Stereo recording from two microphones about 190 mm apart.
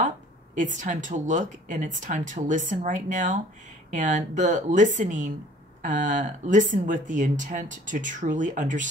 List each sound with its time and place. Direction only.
0.6 s a woman's voice: 40° right (ahead or behind)